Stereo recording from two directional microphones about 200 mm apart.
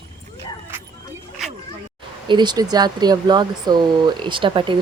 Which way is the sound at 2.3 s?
20° right (ahead or behind).